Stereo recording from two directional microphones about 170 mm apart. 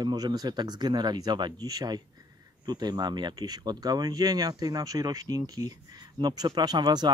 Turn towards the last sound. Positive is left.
turn(degrees=-25)  # may be behind; listen again after turning